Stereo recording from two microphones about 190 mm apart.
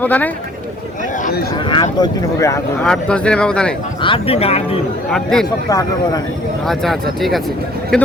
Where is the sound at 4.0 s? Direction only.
30° left (ahead or behind).